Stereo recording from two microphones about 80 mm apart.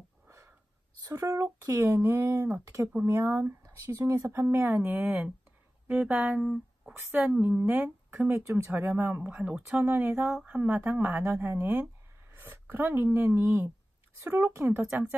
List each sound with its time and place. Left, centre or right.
1.0 s speech: right; by 6.4 s centre
6.4 s a sound: centre
6.9 s speech: right
14.9 s speech: right